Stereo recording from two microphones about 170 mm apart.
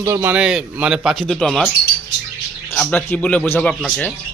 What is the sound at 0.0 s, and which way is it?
A man's voice, 15° right (ahead or behind).